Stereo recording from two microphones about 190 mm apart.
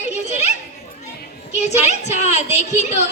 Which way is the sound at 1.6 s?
35° left (ahead or behind).